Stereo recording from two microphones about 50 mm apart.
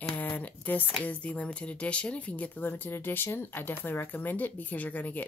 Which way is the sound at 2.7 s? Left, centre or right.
Left.